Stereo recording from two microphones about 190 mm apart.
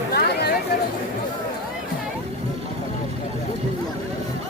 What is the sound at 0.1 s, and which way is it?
Chatter, 60° left (ahead or behind).